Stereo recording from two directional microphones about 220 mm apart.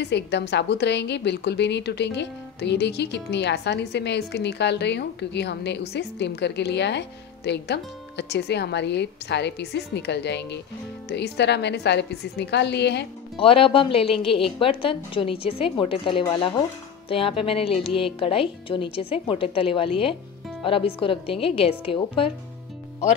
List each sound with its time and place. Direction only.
0.0 s a woman's voice: 50° left (ahead or behind)
13.4 s speech: 25° left (ahead or behind)